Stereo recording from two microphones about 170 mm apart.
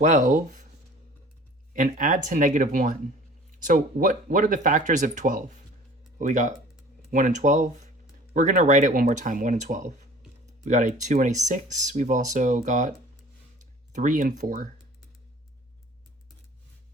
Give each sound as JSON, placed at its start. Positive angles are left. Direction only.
{"t": 0.0, "sound": "speech", "side_deg": -50}
{"t": 1.7, "sound": "speech", "side_deg": -50}
{"t": 13.9, "sound": "speech", "side_deg": -50}